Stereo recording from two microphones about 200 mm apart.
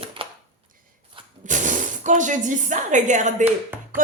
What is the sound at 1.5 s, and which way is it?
A woman's voice, 40° right (ahead or behind).